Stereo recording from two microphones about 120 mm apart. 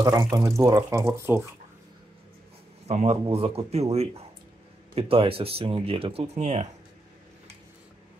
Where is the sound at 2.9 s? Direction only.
55° right (ahead or behind).